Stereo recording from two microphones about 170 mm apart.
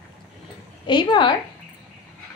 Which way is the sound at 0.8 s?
25° left (ahead or behind).